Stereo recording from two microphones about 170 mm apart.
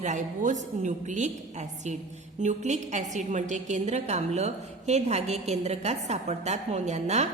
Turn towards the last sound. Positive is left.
turn(degrees=-40)  # may be behind; listen again after turning